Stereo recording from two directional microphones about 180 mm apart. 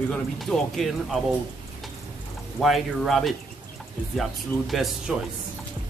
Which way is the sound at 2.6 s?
Centre (ahead or behind).